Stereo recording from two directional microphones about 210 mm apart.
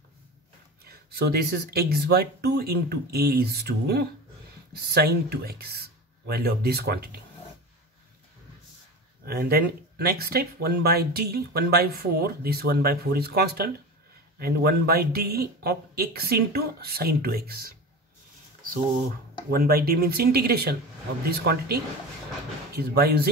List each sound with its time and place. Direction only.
0.8 s speech: 50° right (ahead or behind)
9.2 s speech: 45° right (ahead or behind)
19.5 s speech: 45° right (ahead or behind)